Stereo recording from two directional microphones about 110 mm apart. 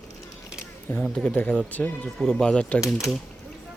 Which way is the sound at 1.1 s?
10° left (ahead or behind).